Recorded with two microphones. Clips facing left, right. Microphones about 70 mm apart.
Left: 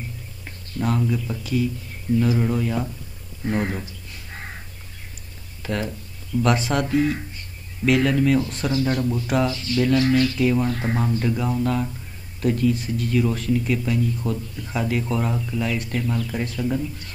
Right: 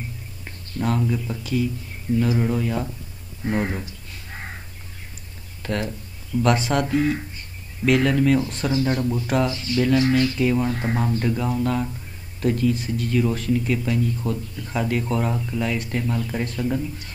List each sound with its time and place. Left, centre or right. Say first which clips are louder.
0.7 s speech: even; centre
5.6 s speech: even; centre
9.9 s speech: even; centre
10.3 s speech: even; centre